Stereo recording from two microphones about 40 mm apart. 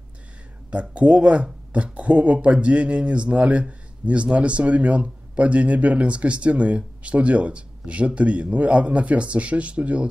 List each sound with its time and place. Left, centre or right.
0.7 s speech: right